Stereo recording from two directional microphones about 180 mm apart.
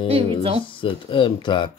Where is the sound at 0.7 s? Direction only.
30° left (ahead or behind).